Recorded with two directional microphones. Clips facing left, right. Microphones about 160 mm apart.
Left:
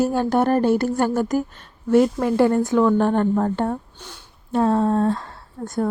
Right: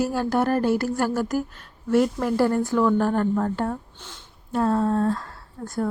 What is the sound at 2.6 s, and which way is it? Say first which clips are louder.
A woman's voice: left 3 dB; 20° left (ahead or behind).